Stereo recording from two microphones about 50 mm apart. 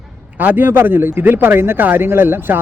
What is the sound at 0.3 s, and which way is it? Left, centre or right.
A man's voice, right.